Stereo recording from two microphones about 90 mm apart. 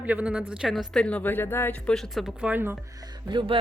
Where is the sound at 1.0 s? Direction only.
20° left (ahead or behind).